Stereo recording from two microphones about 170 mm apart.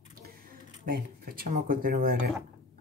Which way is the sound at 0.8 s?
60° right (ahead or behind).